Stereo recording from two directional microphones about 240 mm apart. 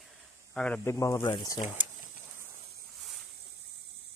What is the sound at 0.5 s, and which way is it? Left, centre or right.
Speech, centre.